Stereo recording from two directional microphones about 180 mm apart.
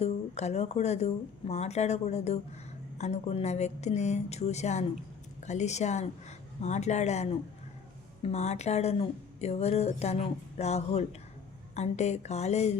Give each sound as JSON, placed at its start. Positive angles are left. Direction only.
{"t": 0.0, "sound": "speech", "side_deg": 35}